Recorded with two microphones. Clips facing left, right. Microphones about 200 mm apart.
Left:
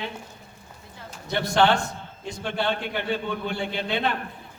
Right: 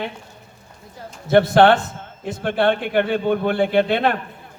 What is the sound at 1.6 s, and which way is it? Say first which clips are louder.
A man's voice: right 7 dB; 60° right (ahead or behind).